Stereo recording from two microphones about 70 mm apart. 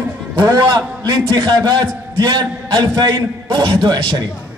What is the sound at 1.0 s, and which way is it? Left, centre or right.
A man's voice, right.